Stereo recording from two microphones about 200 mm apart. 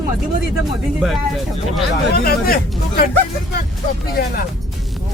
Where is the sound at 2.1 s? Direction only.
50° left (ahead or behind).